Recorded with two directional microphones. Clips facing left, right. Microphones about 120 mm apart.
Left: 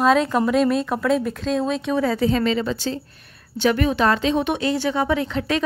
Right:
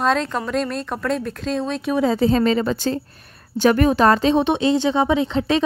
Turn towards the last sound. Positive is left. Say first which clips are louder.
# right 3 dB
turn(degrees=-25)  # may be behind; listen again after turning